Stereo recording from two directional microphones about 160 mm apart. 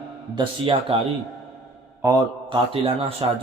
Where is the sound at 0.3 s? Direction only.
30° right (ahead or behind).